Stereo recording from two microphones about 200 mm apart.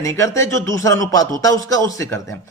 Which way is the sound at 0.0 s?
15° left (ahead or behind).